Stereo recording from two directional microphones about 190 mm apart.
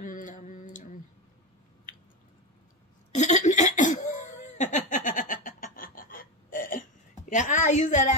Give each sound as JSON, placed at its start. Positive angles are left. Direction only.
{"t": 0.0, "sound": "mantra", "side_deg": 45}
{"t": 3.2, "sound": "laughter", "side_deg": 35}
{"t": 7.2, "sound": "a woman's voice", "side_deg": 40}